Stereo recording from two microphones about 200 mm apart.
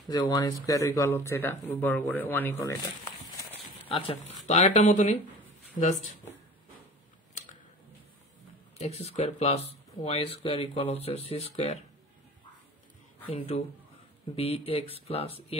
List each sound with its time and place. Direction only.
0.1 s speech: 15° left (ahead or behind)
3.9 s speech: 30° left (ahead or behind)
8.7 s speech: 30° left (ahead or behind)
13.5 s speech: 30° left (ahead or behind)